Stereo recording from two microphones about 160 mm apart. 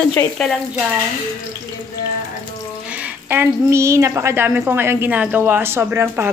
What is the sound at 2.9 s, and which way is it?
A woman's voice, 10° right (ahead or behind).